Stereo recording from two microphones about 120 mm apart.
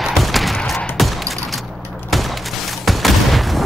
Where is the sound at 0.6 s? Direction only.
10° left (ahead or behind).